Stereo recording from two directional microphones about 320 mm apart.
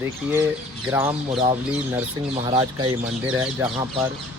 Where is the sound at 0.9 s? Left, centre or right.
Centre.